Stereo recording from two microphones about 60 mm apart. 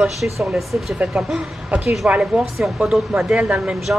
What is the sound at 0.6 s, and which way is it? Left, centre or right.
Speech, centre.